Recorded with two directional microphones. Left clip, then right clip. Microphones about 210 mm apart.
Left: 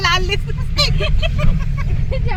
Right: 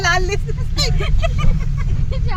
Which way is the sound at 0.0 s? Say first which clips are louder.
Left 1 dB; 20° right (ahead or behind).